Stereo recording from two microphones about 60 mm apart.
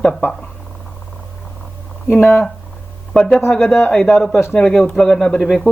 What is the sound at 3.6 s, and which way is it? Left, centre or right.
Speech, left.